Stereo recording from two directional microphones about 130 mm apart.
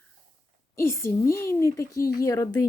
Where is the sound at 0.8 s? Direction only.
20° left (ahead or behind).